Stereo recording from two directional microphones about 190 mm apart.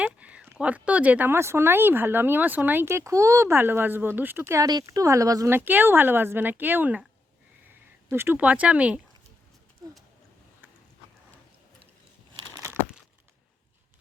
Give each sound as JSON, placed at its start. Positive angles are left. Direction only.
{"t": 0.0, "sound": "speech", "side_deg": -5}
{"t": 8.1, "sound": "speech", "side_deg": -10}
{"t": 12.5, "sound": "crumpling", "side_deg": -20}